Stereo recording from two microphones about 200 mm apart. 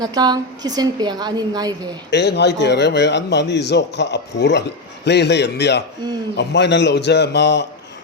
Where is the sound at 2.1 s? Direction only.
55° left (ahead or behind).